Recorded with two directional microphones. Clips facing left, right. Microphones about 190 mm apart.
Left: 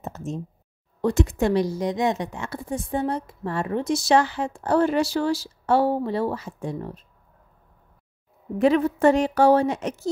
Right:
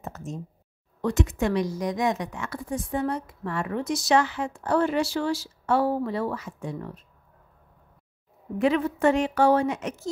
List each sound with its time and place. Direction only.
0.0 s a sound: 25° left (ahead or behind)
1.0 s a woman's voice: 30° left (ahead or behind)
8.5 s a woman's voice: 40° left (ahead or behind)